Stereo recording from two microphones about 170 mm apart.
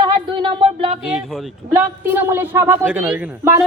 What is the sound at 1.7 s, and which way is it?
A man's voice, 15° right (ahead or behind).